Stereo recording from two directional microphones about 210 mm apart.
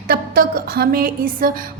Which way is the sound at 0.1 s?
45° right (ahead or behind).